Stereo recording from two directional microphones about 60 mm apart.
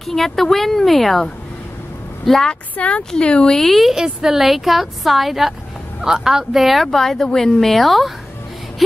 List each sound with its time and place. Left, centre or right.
0.0 s speech: centre
2.7 s speech: left; by 3.9 s centre
3.9 s speech: centre